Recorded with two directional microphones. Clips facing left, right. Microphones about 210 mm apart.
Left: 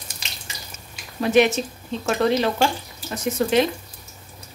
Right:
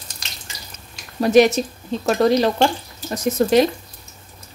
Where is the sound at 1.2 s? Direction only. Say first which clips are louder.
Right 4 dB; 40° right (ahead or behind).